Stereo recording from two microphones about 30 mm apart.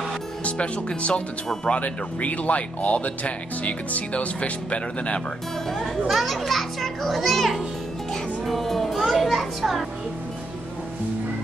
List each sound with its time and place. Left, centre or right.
0.4 s speech: left
1.8 s speech: left
6.0 s a child's voice: centre